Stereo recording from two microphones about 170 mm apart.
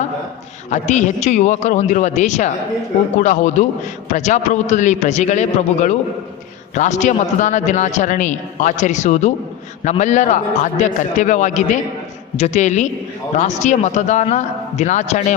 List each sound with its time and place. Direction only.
0.7 s a man's voice: 45° left (ahead or behind)